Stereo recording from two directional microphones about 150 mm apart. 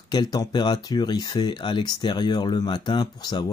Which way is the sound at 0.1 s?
30° left (ahead or behind).